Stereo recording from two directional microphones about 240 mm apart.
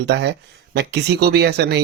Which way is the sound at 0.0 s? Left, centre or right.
Right.